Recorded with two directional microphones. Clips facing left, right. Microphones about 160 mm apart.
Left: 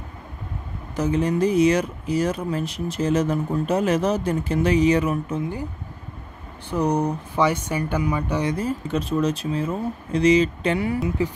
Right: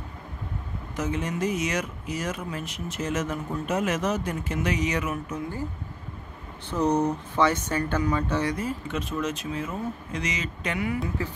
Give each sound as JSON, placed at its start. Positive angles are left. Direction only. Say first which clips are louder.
{"t": 0.9, "sound": "speech", "louder": "left 8 dB", "side_deg": 35}
{"t": 6.7, "sound": "speech", "louder": "left 2 dB", "side_deg": 10}
{"t": 8.5, "sound": "speech", "louder": "left 5 dB", "side_deg": 35}
{"t": 11.2, "sound": "speech", "louder": "left 8 dB", "side_deg": 15}